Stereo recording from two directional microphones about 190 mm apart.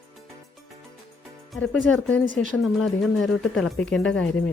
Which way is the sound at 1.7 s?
5° left (ahead or behind).